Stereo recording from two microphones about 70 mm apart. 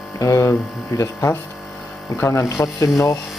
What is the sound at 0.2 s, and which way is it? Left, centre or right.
Speech, left.